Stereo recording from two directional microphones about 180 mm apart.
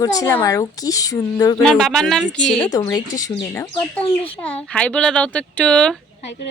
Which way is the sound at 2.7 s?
20° left (ahead or behind).